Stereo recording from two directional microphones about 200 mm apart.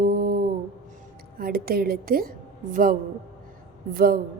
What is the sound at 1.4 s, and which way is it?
Speech, 50° right (ahead or behind).